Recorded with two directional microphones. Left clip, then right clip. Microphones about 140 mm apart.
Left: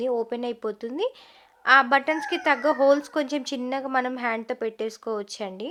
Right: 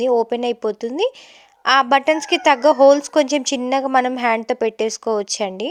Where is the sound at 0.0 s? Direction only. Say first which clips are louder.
Right 9 dB; 40° right (ahead or behind).